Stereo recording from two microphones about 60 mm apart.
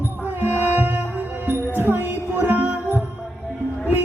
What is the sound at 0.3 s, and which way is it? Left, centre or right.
Music, right.